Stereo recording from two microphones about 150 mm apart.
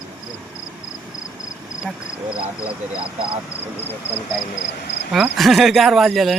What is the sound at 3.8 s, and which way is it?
Speech, 15° left (ahead or behind).